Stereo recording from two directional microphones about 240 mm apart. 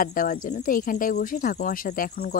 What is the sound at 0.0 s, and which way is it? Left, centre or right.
Speech, left.